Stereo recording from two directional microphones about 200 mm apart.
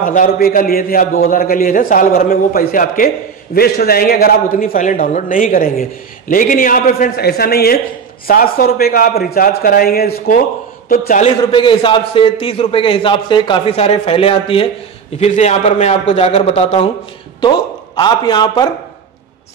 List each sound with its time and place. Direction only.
0.0 s a man's voice: 40° left (ahead or behind)
11.5 s a man's voice: 25° left (ahead or behind)